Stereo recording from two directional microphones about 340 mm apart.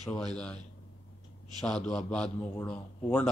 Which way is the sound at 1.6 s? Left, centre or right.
Centre.